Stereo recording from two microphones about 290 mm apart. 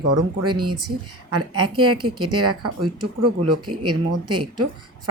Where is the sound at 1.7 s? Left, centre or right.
Right.